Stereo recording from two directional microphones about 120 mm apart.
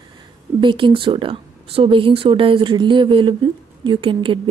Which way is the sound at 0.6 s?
45° right (ahead or behind).